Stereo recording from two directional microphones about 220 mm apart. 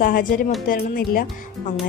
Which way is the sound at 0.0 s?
40° left (ahead or behind).